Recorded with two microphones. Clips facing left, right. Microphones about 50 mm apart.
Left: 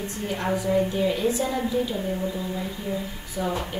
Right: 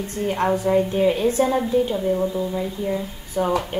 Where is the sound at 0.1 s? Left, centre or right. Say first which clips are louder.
Right 7 dB; right.